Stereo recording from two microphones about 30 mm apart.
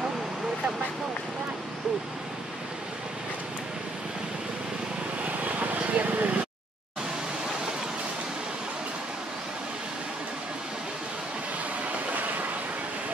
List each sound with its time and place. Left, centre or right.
5.2 s vehicle: right